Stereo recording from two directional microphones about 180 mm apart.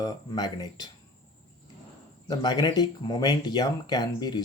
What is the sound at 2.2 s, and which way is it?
Speech, 25° left (ahead or behind).